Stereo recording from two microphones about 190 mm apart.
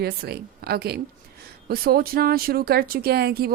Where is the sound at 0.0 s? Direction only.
55° right (ahead or behind).